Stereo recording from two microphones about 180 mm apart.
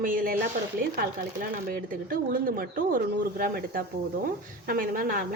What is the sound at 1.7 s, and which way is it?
Speech, 55° right (ahead or behind).